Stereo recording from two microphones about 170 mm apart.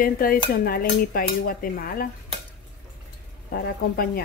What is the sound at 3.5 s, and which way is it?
Speech, 65° left (ahead or behind).